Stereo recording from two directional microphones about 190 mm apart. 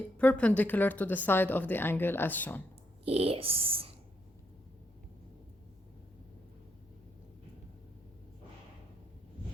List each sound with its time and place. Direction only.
0.2 s speech: 5° left (ahead or behind)
3.0 s speech: 30° right (ahead or behind)